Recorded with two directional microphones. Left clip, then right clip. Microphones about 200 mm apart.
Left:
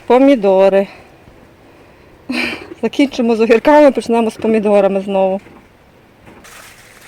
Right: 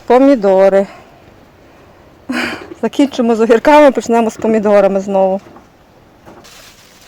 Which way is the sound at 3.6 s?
30° right (ahead or behind).